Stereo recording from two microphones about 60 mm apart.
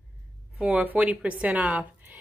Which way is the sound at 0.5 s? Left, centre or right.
Centre.